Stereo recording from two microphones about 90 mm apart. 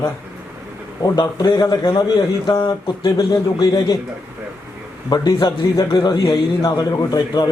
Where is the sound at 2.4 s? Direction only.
30° left (ahead or behind).